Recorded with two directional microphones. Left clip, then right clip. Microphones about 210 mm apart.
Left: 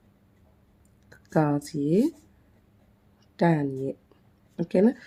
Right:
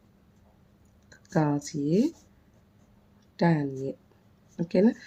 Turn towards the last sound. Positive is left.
turn(degrees=15)  # may be behind; listen again after turning